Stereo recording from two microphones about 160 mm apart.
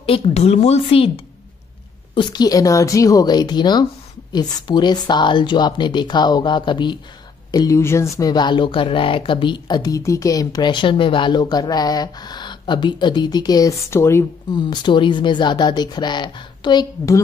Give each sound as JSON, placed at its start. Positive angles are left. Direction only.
{"t": 0.0, "sound": "a woman's voice", "side_deg": 40}
{"t": 2.1, "sound": "speech", "side_deg": 25}
{"t": 14.5, "sound": "speech", "side_deg": 30}